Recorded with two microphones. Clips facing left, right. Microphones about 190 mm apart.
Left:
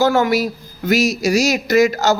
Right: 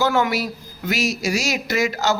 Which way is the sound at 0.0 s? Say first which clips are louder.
Left 5 dB; 40° left (ahead or behind).